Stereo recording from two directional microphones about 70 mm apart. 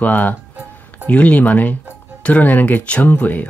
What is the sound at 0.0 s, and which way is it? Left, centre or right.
Speech, left.